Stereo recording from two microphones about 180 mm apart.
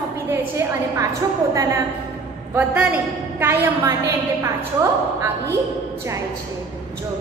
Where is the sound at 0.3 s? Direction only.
10° right (ahead or behind).